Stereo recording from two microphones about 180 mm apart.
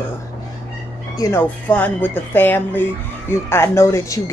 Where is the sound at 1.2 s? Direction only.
15° left (ahead or behind).